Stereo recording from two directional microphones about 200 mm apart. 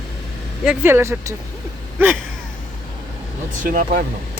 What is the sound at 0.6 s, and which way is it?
Speech, 5° right (ahead or behind).